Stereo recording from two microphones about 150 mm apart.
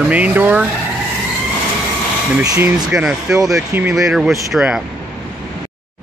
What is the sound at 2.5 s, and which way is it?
Speech, 20° right (ahead or behind).